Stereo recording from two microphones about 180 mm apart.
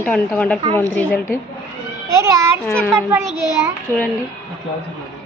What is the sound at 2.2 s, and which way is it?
Speech, 15° right (ahead or behind).